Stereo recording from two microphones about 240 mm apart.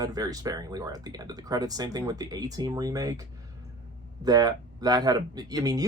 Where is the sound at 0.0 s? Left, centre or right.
Centre.